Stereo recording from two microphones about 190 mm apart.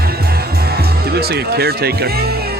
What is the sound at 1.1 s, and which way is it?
Music, 55° right (ahead or behind).